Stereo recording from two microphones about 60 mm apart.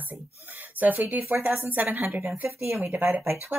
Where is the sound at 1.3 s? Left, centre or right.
Right.